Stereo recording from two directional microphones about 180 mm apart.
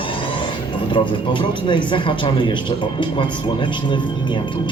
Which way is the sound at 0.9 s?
30° left (ahead or behind).